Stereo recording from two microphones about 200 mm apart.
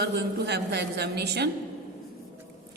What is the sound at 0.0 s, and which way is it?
A woman's voice, 55° right (ahead or behind).